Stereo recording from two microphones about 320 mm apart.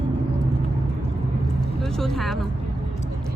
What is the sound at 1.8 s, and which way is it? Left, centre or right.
Vehicle, centre.